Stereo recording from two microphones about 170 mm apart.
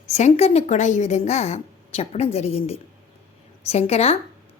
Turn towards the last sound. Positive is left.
turn(degrees=35)  # may be behind; listen again after turning